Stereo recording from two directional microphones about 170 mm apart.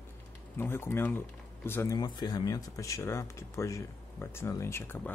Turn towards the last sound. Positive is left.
turn(degrees=15)  # may be behind; listen again after turning